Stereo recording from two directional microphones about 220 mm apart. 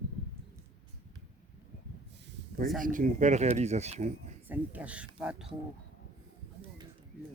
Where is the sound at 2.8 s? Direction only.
35° right (ahead or behind).